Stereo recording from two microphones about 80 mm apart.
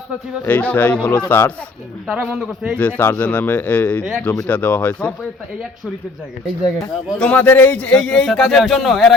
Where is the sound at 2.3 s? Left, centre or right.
Centre.